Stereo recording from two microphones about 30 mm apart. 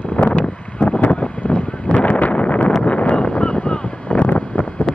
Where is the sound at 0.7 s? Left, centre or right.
Left.